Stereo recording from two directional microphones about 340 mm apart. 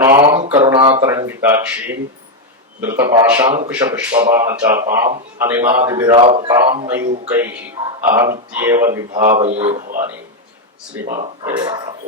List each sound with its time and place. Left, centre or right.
0.0 s a sound: centre
1.0 s speech: centre
3.0 s speech: centre
3.5 s speech: centre
3.9 s speech: centre
11.0 s speech: centre